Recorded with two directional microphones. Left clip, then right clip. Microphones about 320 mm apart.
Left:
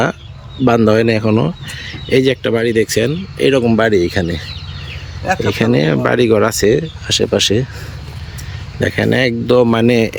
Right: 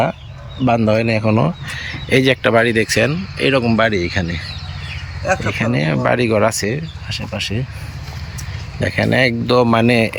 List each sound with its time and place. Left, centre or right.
0.6 s speech: centre
5.5 s speech: centre
8.8 s speech: centre